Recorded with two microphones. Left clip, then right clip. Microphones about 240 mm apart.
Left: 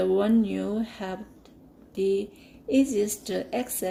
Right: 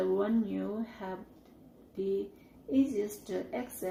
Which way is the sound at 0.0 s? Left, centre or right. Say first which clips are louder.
Left 7 dB; left.